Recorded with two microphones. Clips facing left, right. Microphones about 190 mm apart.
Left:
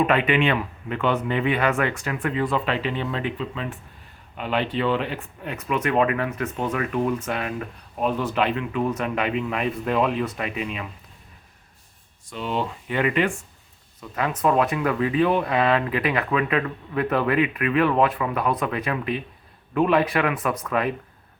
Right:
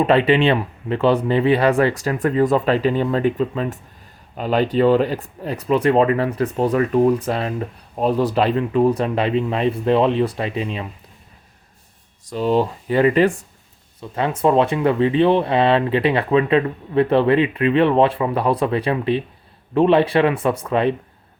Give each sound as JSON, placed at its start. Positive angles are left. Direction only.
{"t": 0.0, "sound": "speech", "side_deg": -30}
{"t": 12.2, "sound": "speech", "side_deg": -40}